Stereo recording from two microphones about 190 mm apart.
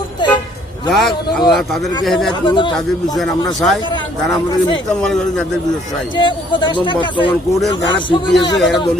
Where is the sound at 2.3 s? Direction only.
25° left (ahead or behind).